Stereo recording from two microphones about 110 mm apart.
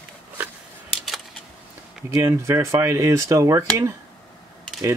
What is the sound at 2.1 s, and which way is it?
Speech, 25° right (ahead or behind).